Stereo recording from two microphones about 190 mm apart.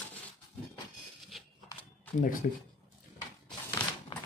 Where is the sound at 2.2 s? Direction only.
45° left (ahead or behind).